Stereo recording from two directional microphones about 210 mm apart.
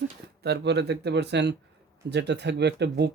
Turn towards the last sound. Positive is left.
turn(degrees=-55)  # may be behind; listen again after turning